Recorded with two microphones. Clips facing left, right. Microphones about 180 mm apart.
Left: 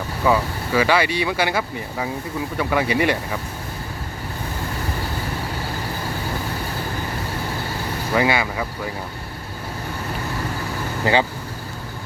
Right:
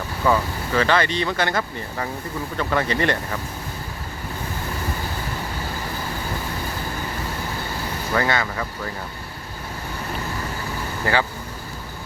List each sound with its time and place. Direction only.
0.3 s speech: 10° left (ahead or behind)
8.1 s speech: 10° left (ahead or behind)
11.0 s speech: 20° left (ahead or behind)